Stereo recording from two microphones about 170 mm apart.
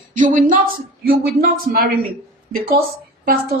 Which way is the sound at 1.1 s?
60° right (ahead or behind).